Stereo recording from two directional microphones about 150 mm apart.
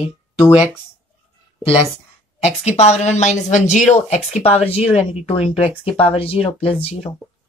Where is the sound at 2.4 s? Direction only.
45° left (ahead or behind).